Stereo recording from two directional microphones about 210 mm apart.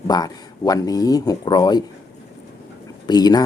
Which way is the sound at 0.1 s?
20° left (ahead or behind).